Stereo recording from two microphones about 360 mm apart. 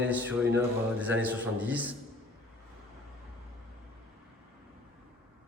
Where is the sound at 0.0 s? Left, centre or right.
Centre.